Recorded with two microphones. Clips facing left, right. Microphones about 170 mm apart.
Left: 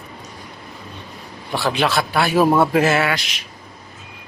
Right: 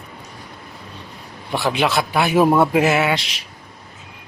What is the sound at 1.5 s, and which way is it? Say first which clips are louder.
A man's voice: even; 20° right (ahead or behind).